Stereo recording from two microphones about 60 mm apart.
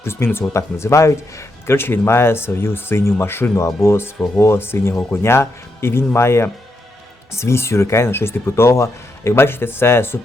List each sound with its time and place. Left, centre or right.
0.0 s a man's voice: left
0.5 s a man's voice: left